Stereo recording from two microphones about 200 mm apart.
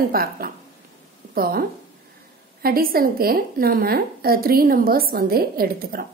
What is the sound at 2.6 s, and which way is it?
A woman's voice, 50° right (ahead or behind).